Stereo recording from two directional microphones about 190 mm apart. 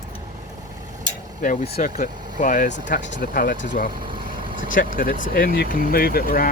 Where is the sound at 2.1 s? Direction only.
20° right (ahead or behind).